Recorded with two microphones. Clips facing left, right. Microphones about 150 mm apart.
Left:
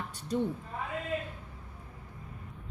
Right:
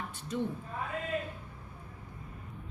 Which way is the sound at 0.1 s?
35° left (ahead or behind).